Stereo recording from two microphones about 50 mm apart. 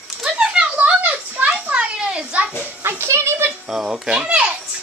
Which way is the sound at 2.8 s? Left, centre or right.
Right.